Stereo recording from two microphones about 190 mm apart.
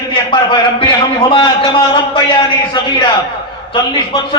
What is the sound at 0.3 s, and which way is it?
A man's voice, 25° left (ahead or behind).